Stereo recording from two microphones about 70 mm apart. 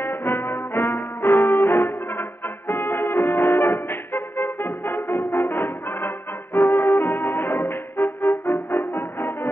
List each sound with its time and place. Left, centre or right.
0.0 s brass instrument: left
8.5 s music: left